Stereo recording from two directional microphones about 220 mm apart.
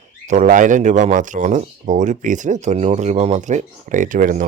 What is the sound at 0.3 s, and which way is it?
Speech, 35° right (ahead or behind).